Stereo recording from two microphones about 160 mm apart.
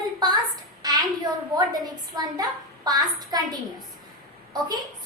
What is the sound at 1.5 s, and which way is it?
A woman's voice, 25° right (ahead or behind).